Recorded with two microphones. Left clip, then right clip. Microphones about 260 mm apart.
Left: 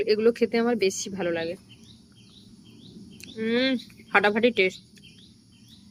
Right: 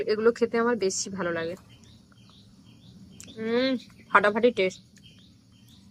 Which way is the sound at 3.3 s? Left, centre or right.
Centre.